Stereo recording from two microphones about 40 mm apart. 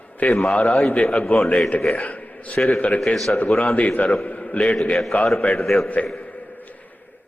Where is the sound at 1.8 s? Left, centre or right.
Centre.